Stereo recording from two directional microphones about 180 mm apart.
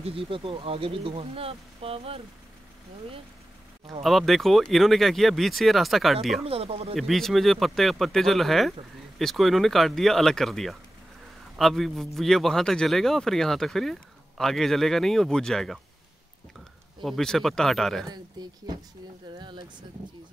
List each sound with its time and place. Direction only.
0.0 s speech: 30° right (ahead or behind)
4.0 s a man's voice: centre (ahead or behind)
6.4 s speech: 30° right (ahead or behind)
7.0 s a man's voice: centre (ahead or behind)
17.0 s a man's voice: centre (ahead or behind)
18.0 s speech: 20° right (ahead or behind)